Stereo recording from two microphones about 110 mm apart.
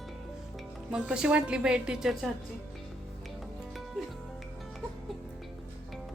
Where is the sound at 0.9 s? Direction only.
10° right (ahead or behind).